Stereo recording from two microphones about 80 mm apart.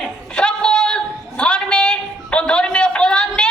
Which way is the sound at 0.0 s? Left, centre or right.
Centre.